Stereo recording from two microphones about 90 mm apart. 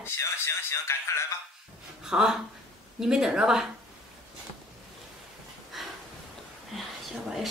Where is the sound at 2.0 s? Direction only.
5° right (ahead or behind).